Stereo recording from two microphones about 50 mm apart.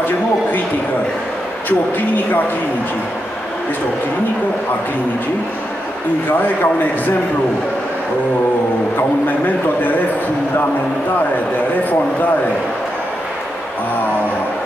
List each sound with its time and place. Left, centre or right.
1.7 s a man's voice: left
6.3 s a man's voice: left